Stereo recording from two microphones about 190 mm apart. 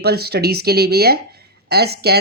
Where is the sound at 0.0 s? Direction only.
55° right (ahead or behind).